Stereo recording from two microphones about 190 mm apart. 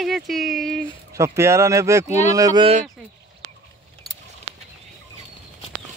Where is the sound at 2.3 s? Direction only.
20° right (ahead or behind).